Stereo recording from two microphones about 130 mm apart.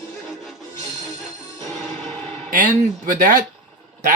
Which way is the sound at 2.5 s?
90° right.